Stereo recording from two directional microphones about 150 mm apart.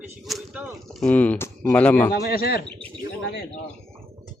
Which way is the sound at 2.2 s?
90° left.